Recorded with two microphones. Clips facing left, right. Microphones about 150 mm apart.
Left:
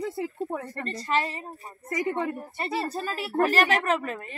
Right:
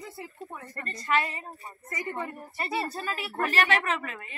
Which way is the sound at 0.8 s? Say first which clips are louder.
Even; 35° left (ahead or behind).